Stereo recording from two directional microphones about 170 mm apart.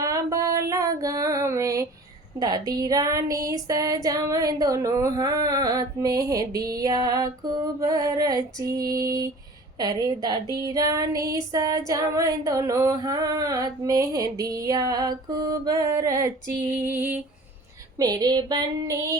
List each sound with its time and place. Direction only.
0.0 s female singing: 20° right (ahead or behind)
16.8 s a sound: 10° right (ahead or behind)
17.9 s female singing: 25° right (ahead or behind)